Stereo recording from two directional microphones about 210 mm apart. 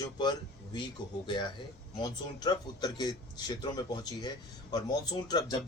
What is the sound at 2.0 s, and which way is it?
Speech, 20° left (ahead or behind).